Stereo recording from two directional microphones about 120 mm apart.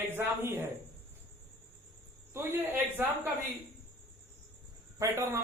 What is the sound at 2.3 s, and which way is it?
Speech, 15° right (ahead or behind).